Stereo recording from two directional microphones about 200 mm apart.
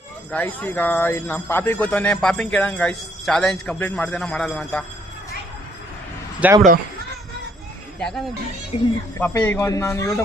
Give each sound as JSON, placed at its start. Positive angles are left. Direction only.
{"t": 0.3, "sound": "speech", "side_deg": 10}
{"t": 6.4, "sound": "speech", "side_deg": -10}
{"t": 7.9, "sound": "speech", "side_deg": 5}
{"t": 8.7, "sound": "speech", "side_deg": 30}
{"t": 9.1, "sound": "speech", "side_deg": 10}